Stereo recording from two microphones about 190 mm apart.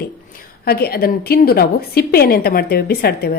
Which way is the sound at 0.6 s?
55° left (ahead or behind).